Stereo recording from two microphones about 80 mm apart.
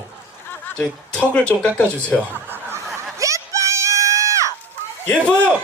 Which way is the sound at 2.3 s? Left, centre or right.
Right.